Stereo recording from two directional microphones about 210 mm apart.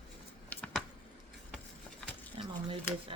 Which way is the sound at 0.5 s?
5° left (ahead or behind).